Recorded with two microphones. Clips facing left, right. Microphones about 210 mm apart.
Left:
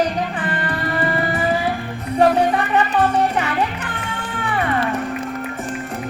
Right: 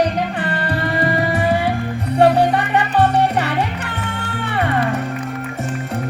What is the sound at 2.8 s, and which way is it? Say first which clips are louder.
Music: right 2 dB; 70° right (ahead or behind).